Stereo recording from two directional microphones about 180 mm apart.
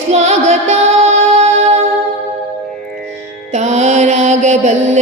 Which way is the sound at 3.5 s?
40° right (ahead or behind).